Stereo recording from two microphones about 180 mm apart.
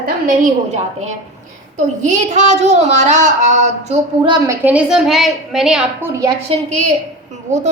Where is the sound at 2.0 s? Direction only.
40° right (ahead or behind).